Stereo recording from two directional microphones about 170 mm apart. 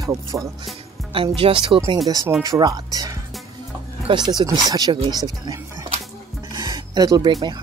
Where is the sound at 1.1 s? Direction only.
30° right (ahead or behind).